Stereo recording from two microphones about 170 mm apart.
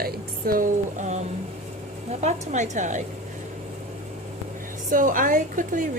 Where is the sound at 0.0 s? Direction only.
60° right (ahead or behind).